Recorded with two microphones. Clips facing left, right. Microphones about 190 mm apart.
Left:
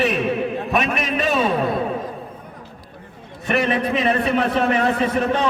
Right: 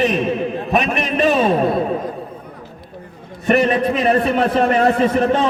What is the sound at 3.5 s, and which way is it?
Speech, 45° right (ahead or behind).